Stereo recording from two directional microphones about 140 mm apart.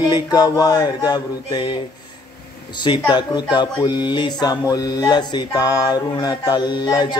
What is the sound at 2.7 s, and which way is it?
Speech, 35° left (ahead or behind).